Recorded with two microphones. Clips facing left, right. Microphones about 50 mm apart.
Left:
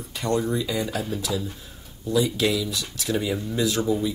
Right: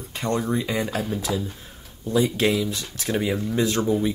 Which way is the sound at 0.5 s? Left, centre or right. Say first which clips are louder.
Right 1 dB; right.